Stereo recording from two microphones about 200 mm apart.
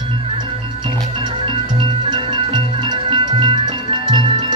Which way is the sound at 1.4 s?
25° right (ahead or behind).